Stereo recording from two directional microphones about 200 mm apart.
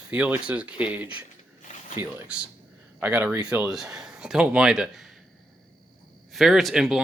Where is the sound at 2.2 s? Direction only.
5° right (ahead or behind).